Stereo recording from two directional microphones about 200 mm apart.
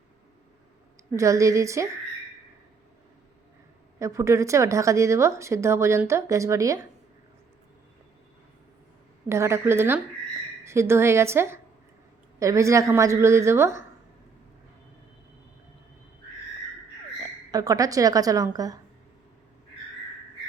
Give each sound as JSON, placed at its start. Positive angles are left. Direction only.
{"t": 1.1, "sound": "a woman's voice", "side_deg": -15}
{"t": 4.0, "sound": "a woman's voice", "side_deg": -15}
{"t": 9.3, "sound": "a woman's voice", "side_deg": -15}
{"t": 17.5, "sound": "a woman's voice", "side_deg": -15}